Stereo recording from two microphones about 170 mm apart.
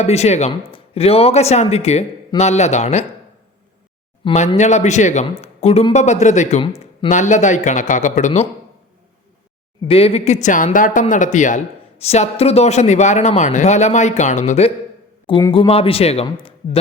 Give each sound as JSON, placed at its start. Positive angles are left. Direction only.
{"t": 0.0, "sound": "a man's voice", "side_deg": 40}
{"t": 4.2, "sound": "speech", "side_deg": 40}
{"t": 6.6, "sound": "speech", "side_deg": 30}
{"t": 7.1, "sound": "speech", "side_deg": 45}
{"t": 9.8, "sound": "speech", "side_deg": 35}
{"t": 15.3, "sound": "a man's voice", "side_deg": 25}